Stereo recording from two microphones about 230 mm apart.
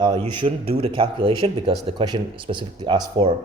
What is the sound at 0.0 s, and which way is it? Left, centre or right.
Speech, centre.